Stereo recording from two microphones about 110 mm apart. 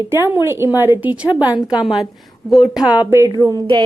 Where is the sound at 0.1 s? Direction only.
20° right (ahead or behind).